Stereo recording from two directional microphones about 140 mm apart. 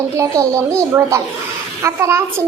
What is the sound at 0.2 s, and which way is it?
A child's voice, 20° right (ahead or behind).